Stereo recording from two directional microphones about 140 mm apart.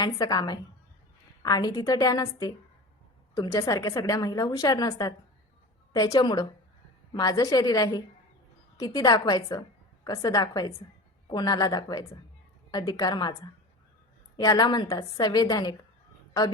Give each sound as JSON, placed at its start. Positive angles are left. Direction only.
{"t": 0.0, "sound": "a woman's voice", "side_deg": 30}